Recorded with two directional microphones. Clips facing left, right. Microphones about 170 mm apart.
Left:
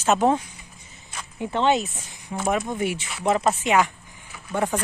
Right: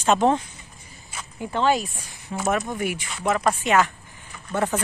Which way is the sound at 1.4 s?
25° left (ahead or behind).